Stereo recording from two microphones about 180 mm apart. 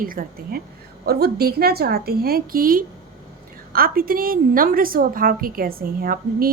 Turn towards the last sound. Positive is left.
turn(degrees=-55)  # may be behind; listen again after turning